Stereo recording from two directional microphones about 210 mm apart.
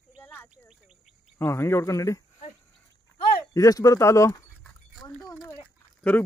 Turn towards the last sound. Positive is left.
turn(degrees=10)  # may be behind; listen again after turning